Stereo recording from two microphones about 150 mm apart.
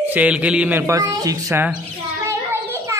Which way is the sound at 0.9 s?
25° right (ahead or behind).